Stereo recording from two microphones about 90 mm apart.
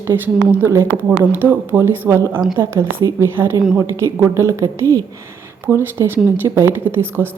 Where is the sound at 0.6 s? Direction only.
30° right (ahead or behind).